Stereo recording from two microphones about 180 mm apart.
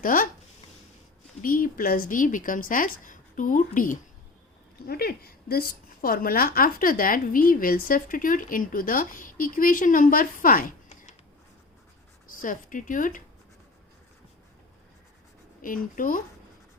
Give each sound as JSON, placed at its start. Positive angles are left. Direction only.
{"t": 0.0, "sound": "a woman's voice", "side_deg": 50}
{"t": 1.4, "sound": "a woman's voice", "side_deg": 50}
{"t": 4.9, "sound": "a woman's voice", "side_deg": 60}
{"t": 12.3, "sound": "speech", "side_deg": 50}
{"t": 15.6, "sound": "a woman's voice", "side_deg": 50}